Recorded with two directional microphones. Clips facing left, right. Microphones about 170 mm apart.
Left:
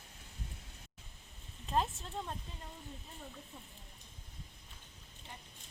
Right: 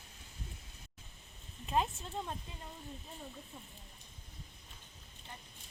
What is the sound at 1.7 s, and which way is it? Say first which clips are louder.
Speech: right 1 dB; 5° right (ahead or behind).